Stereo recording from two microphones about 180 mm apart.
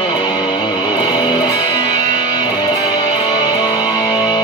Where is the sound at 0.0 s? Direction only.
25° left (ahead or behind).